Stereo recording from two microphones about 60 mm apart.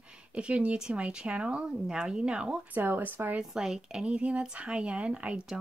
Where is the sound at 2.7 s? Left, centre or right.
Right.